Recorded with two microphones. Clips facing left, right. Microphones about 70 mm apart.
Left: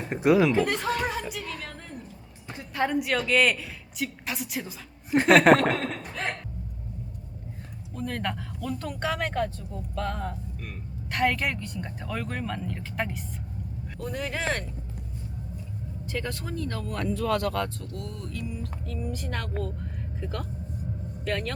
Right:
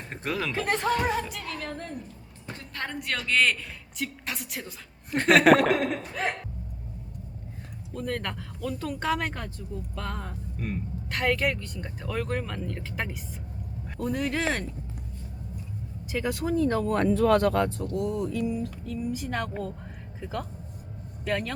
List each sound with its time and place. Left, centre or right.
0.1 s speech: centre
0.9 s speech: centre
2.5 s a woman's voice: centre
7.9 s speech: centre
16.0 s speech: centre
16.6 s speech: right
17.7 s speech: centre